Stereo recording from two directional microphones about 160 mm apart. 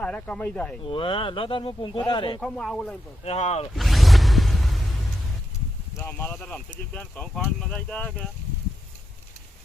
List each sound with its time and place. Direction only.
0.0 s speech: 5° left (ahead or behind)
0.9 s speech: 35° left (ahead or behind)
2.4 s speech: 5° left (ahead or behind)
3.2 s speech: 40° left (ahead or behind)
3.8 s music: centre (ahead or behind)
6.0 s speech: 10° left (ahead or behind)